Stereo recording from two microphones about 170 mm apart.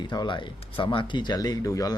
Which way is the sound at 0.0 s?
25° left (ahead or behind).